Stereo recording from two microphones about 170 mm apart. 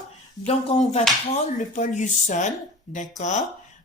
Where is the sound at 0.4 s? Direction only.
40° left (ahead or behind).